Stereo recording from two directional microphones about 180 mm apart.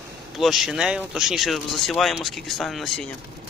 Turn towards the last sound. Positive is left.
turn(degrees=0)  # may be behind; listen again after turning